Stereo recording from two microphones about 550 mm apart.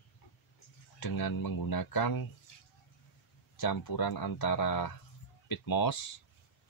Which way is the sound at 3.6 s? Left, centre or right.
Left.